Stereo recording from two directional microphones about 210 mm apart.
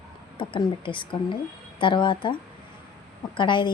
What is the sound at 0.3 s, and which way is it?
Speech, 25° left (ahead or behind).